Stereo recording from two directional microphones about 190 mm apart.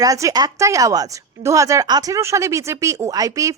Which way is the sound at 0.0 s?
15° right (ahead or behind).